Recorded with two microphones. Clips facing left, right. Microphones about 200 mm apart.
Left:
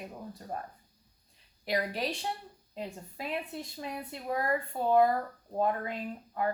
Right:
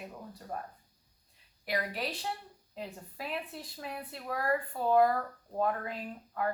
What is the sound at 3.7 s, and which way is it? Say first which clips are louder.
Speech: left 2 dB; 20° left (ahead or behind).